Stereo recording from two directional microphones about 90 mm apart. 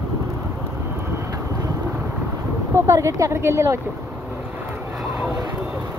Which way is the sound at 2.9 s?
35° right (ahead or behind).